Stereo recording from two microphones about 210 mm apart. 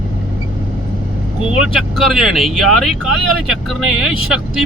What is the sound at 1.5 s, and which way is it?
Speech, centre (ahead or behind).